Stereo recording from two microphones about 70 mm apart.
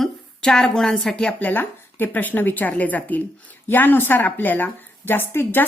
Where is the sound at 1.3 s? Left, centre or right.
Left.